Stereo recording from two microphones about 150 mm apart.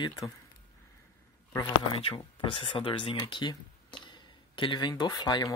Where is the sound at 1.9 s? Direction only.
35° left (ahead or behind).